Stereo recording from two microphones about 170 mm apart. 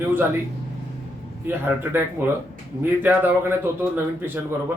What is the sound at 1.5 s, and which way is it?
Speech, 10° right (ahead or behind).